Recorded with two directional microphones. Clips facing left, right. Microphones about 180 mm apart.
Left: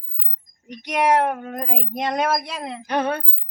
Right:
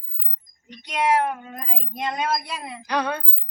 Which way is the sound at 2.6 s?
65° left (ahead or behind).